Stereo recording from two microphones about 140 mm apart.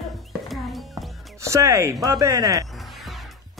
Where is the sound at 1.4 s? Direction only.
20° right (ahead or behind).